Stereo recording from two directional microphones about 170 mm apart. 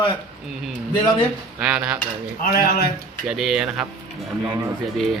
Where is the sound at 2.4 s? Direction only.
60° left (ahead or behind).